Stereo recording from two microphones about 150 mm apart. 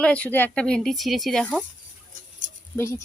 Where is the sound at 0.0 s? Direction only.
10° left (ahead or behind).